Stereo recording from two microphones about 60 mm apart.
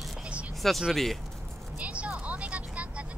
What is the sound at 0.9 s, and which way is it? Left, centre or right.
Speech, centre.